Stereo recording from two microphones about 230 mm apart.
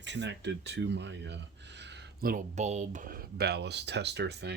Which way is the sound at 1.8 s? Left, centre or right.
Right.